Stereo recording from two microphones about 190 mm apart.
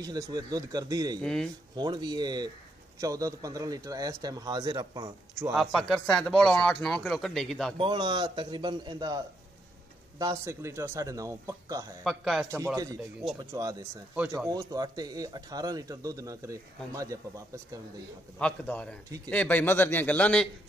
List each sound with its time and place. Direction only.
0.0 s speech: 20° right (ahead or behind)
1.2 s speech: 5° left (ahead or behind)
1.8 s speech: 20° right (ahead or behind)
5.5 s speech: centre (ahead or behind)
7.7 s speech: 25° right (ahead or behind)
12.0 s speech: centre (ahead or behind)
12.4 s speech: 15° right (ahead or behind)
18.4 s a man's voice: 5° left (ahead or behind)